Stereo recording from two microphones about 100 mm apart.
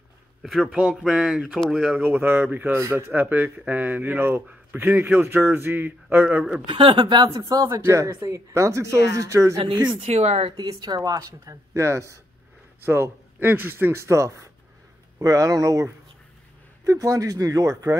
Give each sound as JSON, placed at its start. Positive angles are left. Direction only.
{"t": 0.4, "sound": "speech", "side_deg": 0}
{"t": 2.5, "sound": "a man's voice", "side_deg": -15}
{"t": 6.7, "sound": "speech", "side_deg": -60}
{"t": 7.2, "sound": "speech", "side_deg": -35}
{"t": 10.0, "sound": "speech", "side_deg": -90}
{"t": 10.5, "sound": "speech", "side_deg": -45}